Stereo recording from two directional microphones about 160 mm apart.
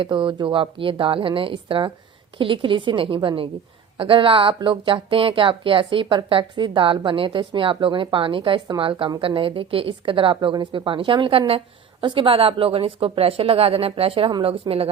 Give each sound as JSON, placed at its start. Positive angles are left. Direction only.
{"t": 0.0, "sound": "speech", "side_deg": -30}